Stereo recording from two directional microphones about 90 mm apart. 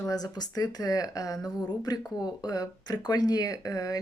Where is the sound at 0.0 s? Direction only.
45° left (ahead or behind).